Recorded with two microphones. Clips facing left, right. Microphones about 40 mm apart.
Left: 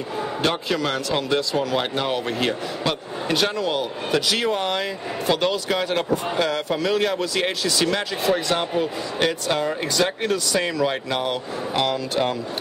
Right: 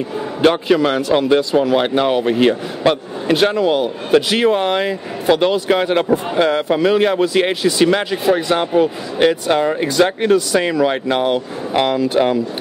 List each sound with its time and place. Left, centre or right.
0.4 s speech: centre